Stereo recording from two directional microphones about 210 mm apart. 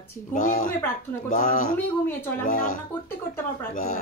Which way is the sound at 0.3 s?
40° left (ahead or behind).